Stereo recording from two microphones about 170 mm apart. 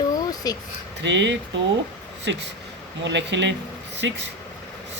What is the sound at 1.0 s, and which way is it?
Speech, 90° right.